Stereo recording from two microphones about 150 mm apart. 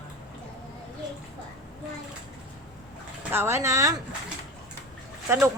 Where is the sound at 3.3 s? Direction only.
15° right (ahead or behind).